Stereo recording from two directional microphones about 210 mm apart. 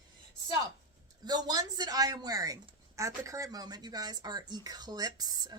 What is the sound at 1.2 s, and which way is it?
Speech, 20° right (ahead or behind).